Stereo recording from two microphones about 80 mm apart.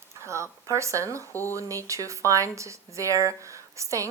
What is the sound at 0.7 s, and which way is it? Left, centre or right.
A woman's voice, right.